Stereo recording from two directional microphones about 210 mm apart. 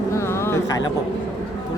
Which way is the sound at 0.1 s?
10° left (ahead or behind).